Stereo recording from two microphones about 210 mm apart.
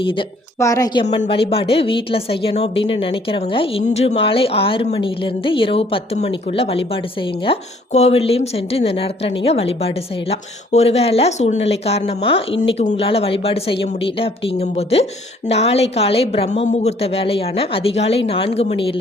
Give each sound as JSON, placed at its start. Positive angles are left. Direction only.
{"t": 0.0, "sound": "a woman's voice", "side_deg": 25}
{"t": 1.2, "sound": "a woman's voice", "side_deg": 25}